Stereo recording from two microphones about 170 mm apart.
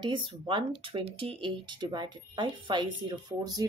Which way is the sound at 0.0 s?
30° right (ahead or behind).